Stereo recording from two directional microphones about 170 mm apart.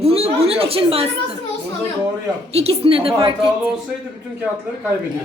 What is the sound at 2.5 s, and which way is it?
Speech, 35° right (ahead or behind).